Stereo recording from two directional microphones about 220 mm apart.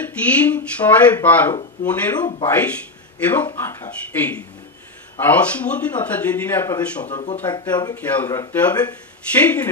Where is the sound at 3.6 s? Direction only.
10° left (ahead or behind).